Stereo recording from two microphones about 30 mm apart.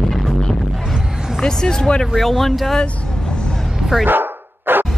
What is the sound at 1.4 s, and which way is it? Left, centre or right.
Speech, left.